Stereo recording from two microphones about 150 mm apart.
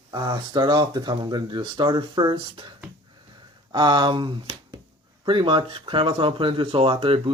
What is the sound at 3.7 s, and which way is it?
Speech, 30° right (ahead or behind).